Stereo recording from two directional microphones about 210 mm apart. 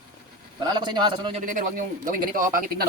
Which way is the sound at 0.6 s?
20° right (ahead or behind).